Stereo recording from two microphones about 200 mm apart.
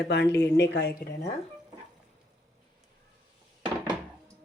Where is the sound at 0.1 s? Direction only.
60° left (ahead or behind).